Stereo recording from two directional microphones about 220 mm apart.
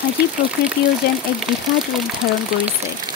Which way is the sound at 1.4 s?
Centre (ahead or behind).